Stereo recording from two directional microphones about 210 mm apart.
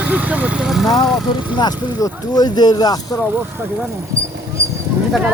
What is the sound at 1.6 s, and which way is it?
Speech, 20° left (ahead or behind).